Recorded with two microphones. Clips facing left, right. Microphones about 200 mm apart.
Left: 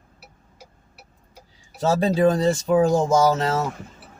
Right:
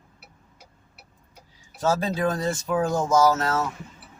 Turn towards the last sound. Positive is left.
turn(degrees=30)  # may be behind; listen again after turning